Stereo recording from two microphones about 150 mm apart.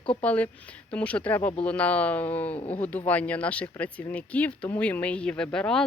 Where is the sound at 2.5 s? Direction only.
45° left (ahead or behind).